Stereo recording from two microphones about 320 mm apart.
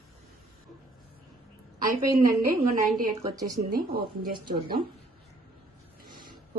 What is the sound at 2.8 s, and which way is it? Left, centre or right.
Speech, centre.